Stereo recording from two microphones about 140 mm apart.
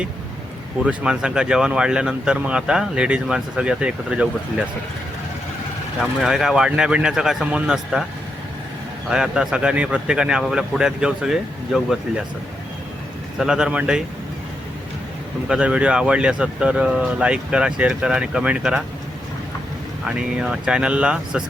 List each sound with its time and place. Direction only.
0.9 s speech: 5° right (ahead or behind)
6.0 s speech: centre (ahead or behind)
9.0 s speech: 5° right (ahead or behind)
13.4 s speech: 5° right (ahead or behind)
15.4 s speech: 10° right (ahead or behind)
20.1 s speech: 5° right (ahead or behind)